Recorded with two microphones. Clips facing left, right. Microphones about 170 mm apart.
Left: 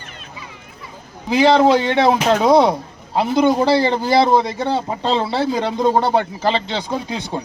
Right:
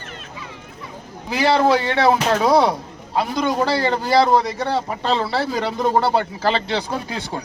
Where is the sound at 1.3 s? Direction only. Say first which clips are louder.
Left 4 dB; 20° left (ahead or behind).